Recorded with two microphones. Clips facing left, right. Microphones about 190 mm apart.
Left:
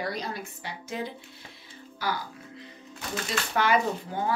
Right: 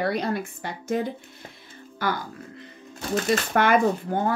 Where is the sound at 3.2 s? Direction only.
55° right (ahead or behind).